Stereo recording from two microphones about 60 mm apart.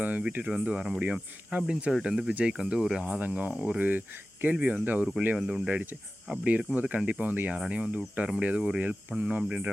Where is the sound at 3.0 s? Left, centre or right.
Right.